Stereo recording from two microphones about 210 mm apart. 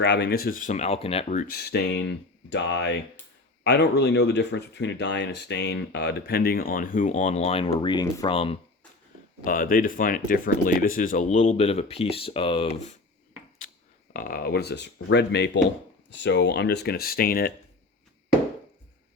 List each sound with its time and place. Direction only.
0.0 s speech: 55° left (ahead or behind); by 8.5 s 25° left (ahead or behind)
9.4 s speech: 40° left (ahead or behind)
14.1 s speech: 40° left (ahead or behind)